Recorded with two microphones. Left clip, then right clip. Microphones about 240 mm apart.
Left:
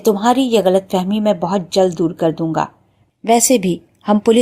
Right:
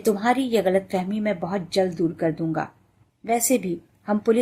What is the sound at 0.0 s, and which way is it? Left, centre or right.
A woman's voice, left.